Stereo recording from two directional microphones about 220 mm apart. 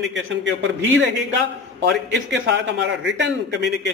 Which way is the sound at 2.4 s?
55° right (ahead or behind).